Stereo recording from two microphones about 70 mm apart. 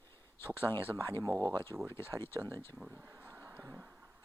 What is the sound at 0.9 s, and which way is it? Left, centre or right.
Speech, right.